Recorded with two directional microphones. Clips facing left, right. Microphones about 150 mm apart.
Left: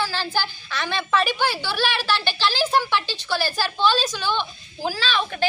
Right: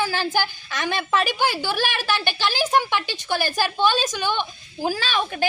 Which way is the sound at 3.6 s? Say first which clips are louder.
Right 1 dB; 15° right (ahead or behind).